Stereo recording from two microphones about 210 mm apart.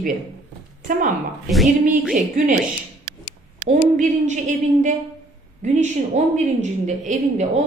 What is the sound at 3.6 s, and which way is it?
A woman's voice, 35° right (ahead or behind).